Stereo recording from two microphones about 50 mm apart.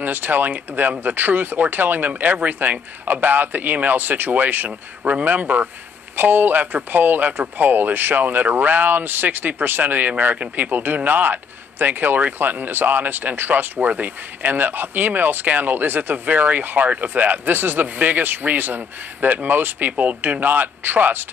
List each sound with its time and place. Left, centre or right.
0.0 s speech: right